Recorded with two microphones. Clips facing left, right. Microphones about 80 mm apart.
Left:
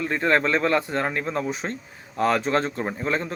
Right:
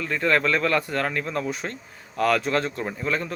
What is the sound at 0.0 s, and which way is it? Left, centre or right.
A man's voice, left.